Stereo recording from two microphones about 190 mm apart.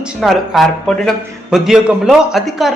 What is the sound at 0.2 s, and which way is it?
A man's voice, centre (ahead or behind).